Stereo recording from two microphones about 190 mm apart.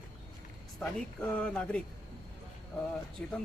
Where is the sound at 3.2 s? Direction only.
5° left (ahead or behind).